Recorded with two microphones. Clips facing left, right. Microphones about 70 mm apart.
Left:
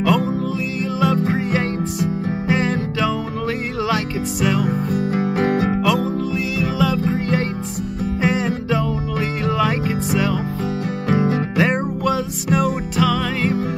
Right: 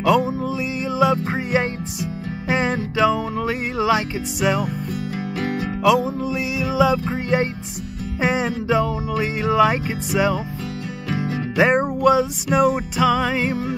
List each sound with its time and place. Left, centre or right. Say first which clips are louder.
0.0 s music: even; centre
4.6 s music: left 6 dB; left
5.9 s music: right 2 dB; centre
11.5 s music: right 2 dB; centre